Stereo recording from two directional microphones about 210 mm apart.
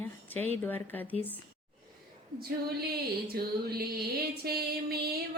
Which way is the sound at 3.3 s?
45° right (ahead or behind).